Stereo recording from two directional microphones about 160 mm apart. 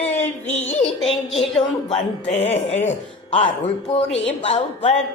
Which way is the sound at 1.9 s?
40° left (ahead or behind).